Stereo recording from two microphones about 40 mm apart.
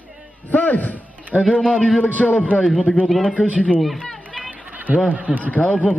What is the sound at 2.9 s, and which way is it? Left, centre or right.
Speech, left.